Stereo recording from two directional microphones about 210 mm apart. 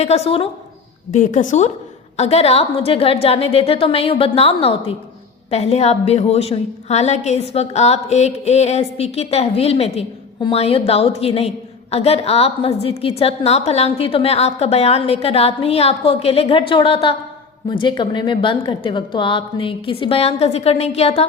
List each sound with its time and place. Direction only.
0.0 s a woman's voice: 30° left (ahead or behind)